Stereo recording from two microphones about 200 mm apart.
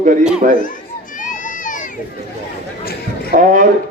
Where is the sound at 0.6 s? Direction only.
40° left (ahead or behind).